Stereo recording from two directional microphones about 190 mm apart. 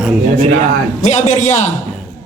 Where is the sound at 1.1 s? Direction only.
35° left (ahead or behind).